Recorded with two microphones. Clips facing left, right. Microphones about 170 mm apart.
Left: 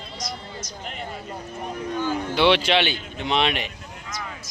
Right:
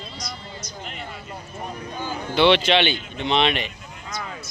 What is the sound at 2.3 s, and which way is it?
A man's voice, 5° left (ahead or behind).